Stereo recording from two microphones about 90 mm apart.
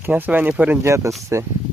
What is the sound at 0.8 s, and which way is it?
Speech, 35° right (ahead or behind).